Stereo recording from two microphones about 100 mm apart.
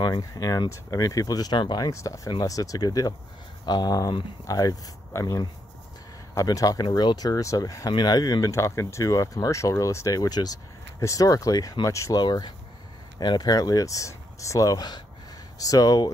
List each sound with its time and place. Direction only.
0.0 s speech: 35° left (ahead or behind)
1.9 s speech: 35° left (ahead or behind)
12.2 s speech: 45° left (ahead or behind)